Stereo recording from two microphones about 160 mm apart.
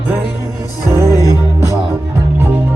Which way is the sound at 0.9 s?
15° right (ahead or behind).